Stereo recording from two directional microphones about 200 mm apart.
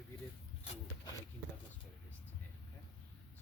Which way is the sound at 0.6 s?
25° left (ahead or behind).